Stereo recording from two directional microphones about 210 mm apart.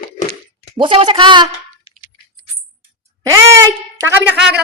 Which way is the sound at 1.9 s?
25° left (ahead or behind).